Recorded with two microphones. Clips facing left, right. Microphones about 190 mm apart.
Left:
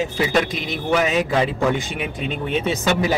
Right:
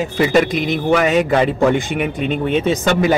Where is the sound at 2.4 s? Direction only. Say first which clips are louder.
Right 4 dB; 50° right (ahead or behind).